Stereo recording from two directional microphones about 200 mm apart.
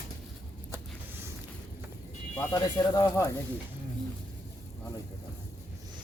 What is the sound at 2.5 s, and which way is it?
Speech, 20° left (ahead or behind).